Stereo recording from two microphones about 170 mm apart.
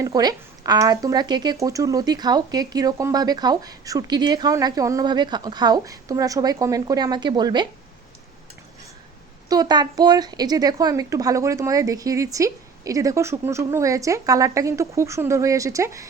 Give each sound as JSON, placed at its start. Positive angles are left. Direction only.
{"t": 0.0, "sound": "speech", "side_deg": -20}
{"t": 9.5, "sound": "speech", "side_deg": -25}